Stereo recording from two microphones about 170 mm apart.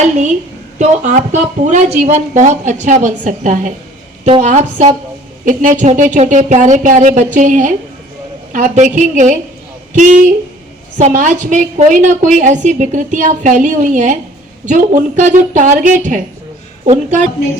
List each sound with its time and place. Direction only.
0.8 s a woman's voice: 45° right (ahead or behind)